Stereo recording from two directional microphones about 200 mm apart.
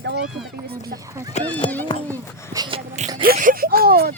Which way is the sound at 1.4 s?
35° left (ahead or behind).